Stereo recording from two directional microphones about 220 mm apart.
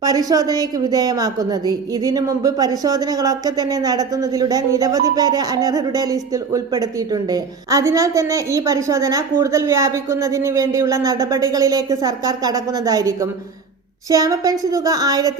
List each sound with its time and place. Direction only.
0.0 s a woman's voice: 15° right (ahead or behind)